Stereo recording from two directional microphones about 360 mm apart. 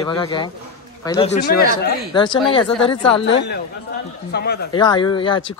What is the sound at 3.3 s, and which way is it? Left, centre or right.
Speech, left.